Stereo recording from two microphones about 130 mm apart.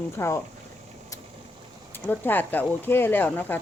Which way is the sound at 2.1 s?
15° left (ahead or behind).